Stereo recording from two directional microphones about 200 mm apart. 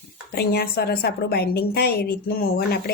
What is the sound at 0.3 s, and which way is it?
A woman's voice, 50° left (ahead or behind).